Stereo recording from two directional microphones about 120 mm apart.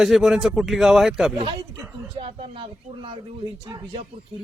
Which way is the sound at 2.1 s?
50° right (ahead or behind).